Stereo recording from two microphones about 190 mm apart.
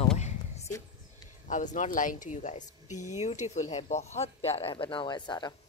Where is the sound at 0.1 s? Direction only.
35° left (ahead or behind).